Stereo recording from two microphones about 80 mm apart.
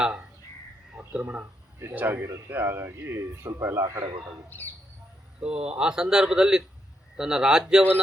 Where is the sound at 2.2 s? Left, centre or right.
Right.